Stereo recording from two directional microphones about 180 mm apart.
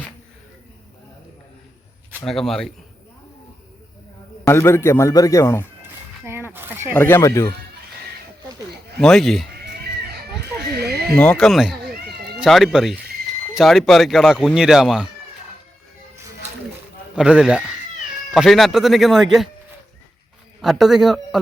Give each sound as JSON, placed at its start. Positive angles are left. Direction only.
{"t": 2.2, "sound": "speech", "side_deg": 0}
{"t": 4.4, "sound": "a man's voice", "side_deg": 15}
{"t": 6.2, "sound": "a sound", "side_deg": -15}
{"t": 6.9, "sound": "a man's voice", "side_deg": 10}
{"t": 9.0, "sound": "speech", "side_deg": 0}
{"t": 10.8, "sound": "a sound", "side_deg": -60}
{"t": 11.2, "sound": "speech", "side_deg": 5}
{"t": 11.9, "sound": "cat", "side_deg": -65}
{"t": 12.4, "sound": "speech", "side_deg": 0}
{"t": 17.2, "sound": "speech", "side_deg": -5}
{"t": 20.6, "sound": "speech", "side_deg": 0}